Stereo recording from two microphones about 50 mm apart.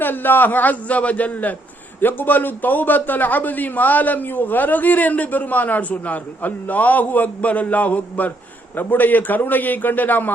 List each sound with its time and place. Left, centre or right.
0.0 s a man's voice: left